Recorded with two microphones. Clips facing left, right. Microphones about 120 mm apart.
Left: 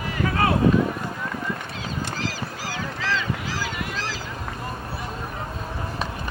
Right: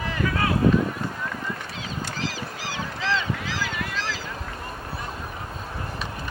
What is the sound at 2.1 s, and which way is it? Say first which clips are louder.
Goose: left 1 dB; 45° left (ahead or behind).